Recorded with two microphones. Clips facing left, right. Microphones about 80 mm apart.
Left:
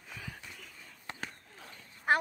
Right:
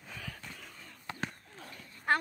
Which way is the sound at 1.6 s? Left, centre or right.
Centre.